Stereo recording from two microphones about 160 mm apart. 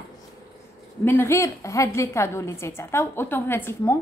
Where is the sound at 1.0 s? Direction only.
15° left (ahead or behind).